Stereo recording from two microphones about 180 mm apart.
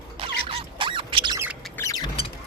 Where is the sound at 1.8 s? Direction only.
20° left (ahead or behind).